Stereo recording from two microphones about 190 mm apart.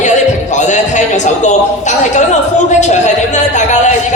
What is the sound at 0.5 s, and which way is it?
A man's voice, 40° left (ahead or behind).